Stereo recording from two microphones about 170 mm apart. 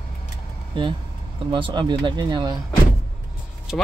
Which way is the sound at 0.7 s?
30° right (ahead or behind).